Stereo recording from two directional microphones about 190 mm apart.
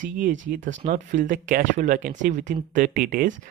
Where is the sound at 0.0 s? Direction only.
45° right (ahead or behind).